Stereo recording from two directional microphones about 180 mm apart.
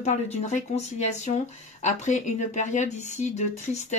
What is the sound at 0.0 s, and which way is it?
Speech, 40° left (ahead or behind).